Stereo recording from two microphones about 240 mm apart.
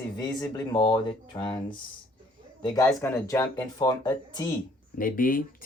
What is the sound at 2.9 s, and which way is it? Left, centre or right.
Speech, centre.